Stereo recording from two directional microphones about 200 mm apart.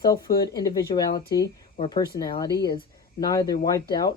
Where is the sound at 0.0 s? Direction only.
20° left (ahead or behind).